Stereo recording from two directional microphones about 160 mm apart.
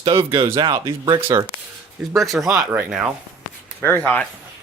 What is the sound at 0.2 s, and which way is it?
Speech, 20° right (ahead or behind).